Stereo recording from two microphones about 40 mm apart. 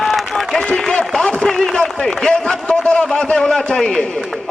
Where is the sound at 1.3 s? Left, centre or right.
Centre.